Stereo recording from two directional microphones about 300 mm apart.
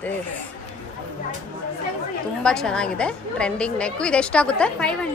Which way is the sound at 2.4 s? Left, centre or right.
Centre.